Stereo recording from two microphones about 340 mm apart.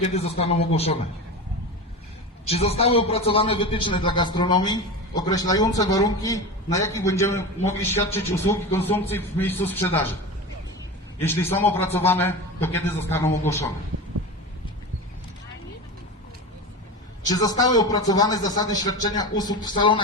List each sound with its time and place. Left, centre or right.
0.1 s a man's voice: centre
2.5 s a man's voice: centre
11.2 s a man's voice: centre
17.2 s a man's voice: centre